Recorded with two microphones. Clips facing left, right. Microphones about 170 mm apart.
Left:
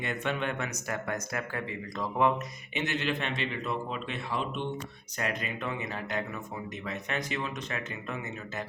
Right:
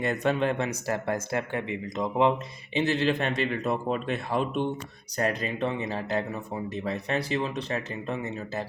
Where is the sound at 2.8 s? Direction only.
35° right (ahead or behind).